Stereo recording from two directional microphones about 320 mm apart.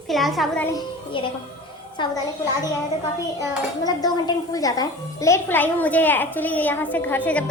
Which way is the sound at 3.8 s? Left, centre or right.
Centre.